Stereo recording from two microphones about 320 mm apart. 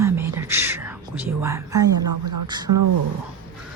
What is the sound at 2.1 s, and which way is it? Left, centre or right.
Speech, right.